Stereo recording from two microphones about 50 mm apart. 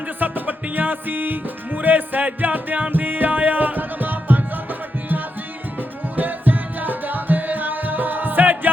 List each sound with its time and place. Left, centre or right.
0.2 s music: right
6.1 s music: right